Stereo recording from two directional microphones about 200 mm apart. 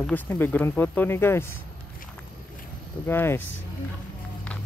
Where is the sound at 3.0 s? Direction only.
10° left (ahead or behind).